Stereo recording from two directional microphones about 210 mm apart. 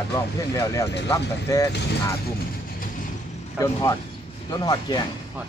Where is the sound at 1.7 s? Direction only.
50° left (ahead or behind).